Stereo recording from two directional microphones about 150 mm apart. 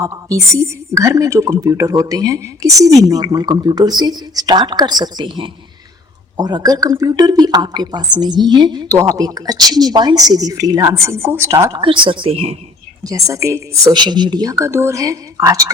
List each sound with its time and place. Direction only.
0.0 s a woman's voice: 20° right (ahead or behind)
11.8 s a woman's voice: 35° right (ahead or behind)
13.1 s a woman's voice: 20° right (ahead or behind)